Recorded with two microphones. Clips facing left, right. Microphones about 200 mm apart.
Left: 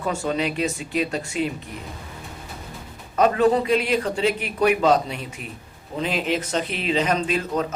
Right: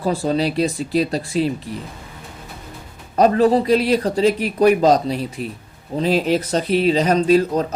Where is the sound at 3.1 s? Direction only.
35° right (ahead or behind).